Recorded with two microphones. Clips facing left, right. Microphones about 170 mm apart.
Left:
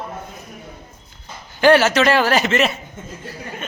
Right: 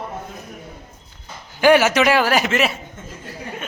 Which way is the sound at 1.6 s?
15° right (ahead or behind).